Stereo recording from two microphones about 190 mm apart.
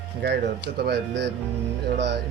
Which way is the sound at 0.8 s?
60° right (ahead or behind).